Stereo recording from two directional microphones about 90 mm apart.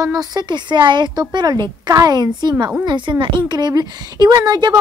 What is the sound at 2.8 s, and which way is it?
A woman's voice, 60° right (ahead or behind).